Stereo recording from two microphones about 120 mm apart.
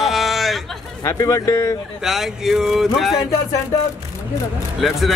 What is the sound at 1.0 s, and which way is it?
Speech, 25° left (ahead or behind).